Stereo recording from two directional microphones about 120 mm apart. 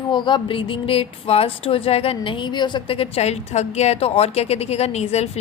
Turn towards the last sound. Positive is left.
turn(degrees=65)  # may be behind; listen again after turning